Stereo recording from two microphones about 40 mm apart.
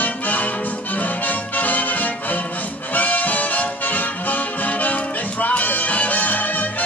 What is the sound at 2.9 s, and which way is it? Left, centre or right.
Music, left.